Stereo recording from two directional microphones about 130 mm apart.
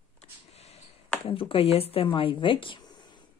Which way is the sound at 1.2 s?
45° left (ahead or behind).